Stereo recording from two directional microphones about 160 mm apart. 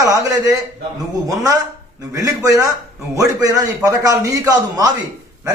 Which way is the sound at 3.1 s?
20° right (ahead or behind).